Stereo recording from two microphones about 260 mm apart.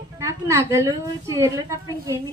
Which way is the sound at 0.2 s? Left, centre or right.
Centre.